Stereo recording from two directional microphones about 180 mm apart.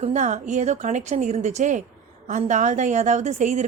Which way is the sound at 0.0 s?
40° right (ahead or behind).